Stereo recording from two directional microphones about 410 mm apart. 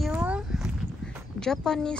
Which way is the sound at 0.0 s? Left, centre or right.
Centre.